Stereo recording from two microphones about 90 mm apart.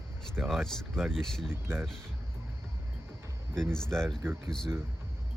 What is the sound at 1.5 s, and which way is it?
Speech, 25° right (ahead or behind).